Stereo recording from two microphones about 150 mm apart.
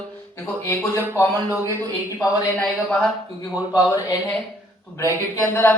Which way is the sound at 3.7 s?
25° left (ahead or behind).